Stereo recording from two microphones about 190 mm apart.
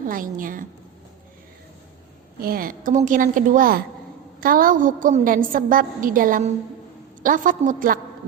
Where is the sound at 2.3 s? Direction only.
50° right (ahead or behind).